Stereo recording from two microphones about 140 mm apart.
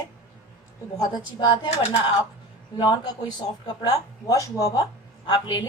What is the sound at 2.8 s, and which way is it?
A woman's voice, 30° left (ahead or behind).